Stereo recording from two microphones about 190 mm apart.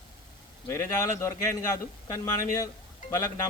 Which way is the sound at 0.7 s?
15° left (ahead or behind).